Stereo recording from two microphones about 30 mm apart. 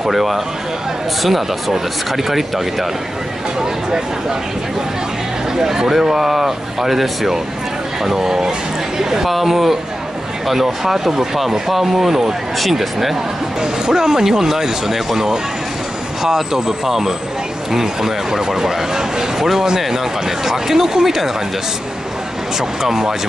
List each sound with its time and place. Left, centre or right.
0.1 s speech: centre
5.6 s speech: centre
9.2 s speech: centre
13.6 s speech: right
22.6 s speech: centre